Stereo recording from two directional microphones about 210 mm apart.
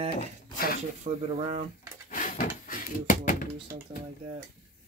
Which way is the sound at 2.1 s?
40° left (ahead or behind).